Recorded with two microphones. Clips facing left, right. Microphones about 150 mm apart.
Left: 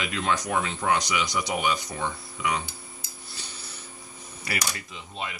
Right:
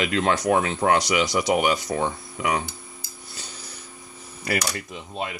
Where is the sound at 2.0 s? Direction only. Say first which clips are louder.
Right 4 dB; 55° right (ahead or behind).